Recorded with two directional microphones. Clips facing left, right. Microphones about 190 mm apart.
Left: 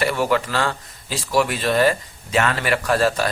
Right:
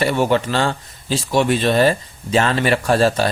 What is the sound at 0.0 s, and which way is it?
Speech, 25° right (ahead or behind).